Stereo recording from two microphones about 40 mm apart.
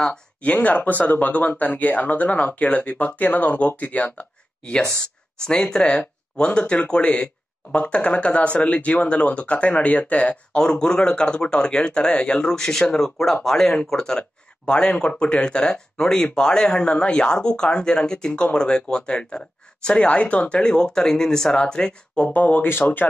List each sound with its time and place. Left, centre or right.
0.1 s speech: left
10.5 s speech: centre
12.4 s speech: centre
19.9 s speech: left
22.3 s speech: left
22.6 s speech: left